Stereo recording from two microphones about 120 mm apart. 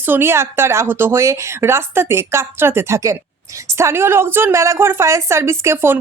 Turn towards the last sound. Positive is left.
turn(degrees=-20)  # may be behind; listen again after turning